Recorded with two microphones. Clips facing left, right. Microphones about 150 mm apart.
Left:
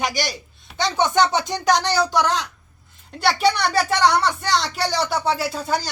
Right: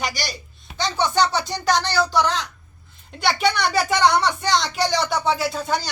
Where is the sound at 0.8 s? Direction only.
15° left (ahead or behind).